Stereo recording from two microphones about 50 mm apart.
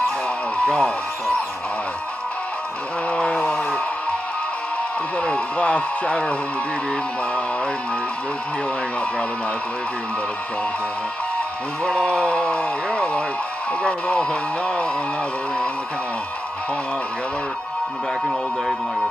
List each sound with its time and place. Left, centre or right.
0.7 s speech: centre
3.1 s a sound: centre
5.2 s speech: left
11.8 s speech: centre